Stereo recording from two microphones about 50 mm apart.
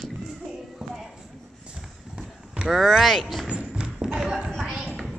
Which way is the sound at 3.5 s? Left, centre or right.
Right.